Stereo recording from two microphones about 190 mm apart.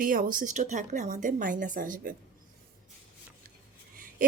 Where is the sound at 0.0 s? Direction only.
50° right (ahead or behind).